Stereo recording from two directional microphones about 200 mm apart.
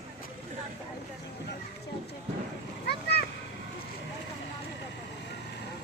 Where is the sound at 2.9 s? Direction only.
55° left (ahead or behind).